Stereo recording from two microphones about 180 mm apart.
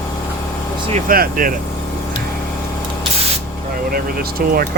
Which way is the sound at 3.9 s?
55° right (ahead or behind).